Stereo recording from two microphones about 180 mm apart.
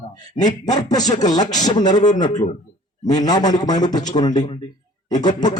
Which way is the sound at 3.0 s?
20° left (ahead or behind).